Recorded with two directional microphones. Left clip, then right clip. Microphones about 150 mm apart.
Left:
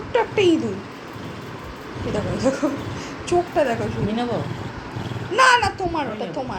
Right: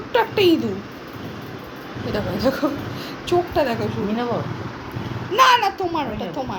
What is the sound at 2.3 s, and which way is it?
A woman's voice, 10° left (ahead or behind).